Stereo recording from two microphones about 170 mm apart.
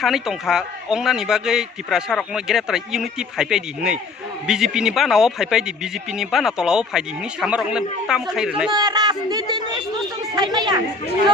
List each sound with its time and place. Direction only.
0.0 s speech: centre (ahead or behind)
8.7 s a sound: 25° right (ahead or behind)
10.3 s speech: 25° right (ahead or behind)